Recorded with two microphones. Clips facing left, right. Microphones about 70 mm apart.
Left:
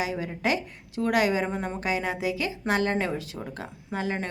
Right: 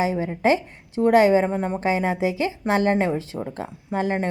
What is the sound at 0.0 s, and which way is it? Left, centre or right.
A woman's voice, right.